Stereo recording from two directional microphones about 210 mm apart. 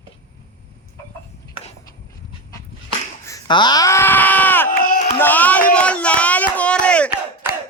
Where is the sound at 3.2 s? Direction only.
20° left (ahead or behind).